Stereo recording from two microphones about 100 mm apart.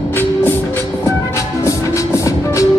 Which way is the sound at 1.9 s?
30° left (ahead or behind).